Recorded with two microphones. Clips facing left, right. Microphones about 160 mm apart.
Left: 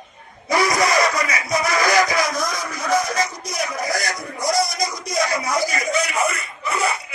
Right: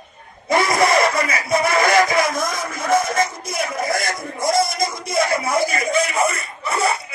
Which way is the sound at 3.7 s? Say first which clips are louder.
Right 2 dB; 25° right (ahead or behind).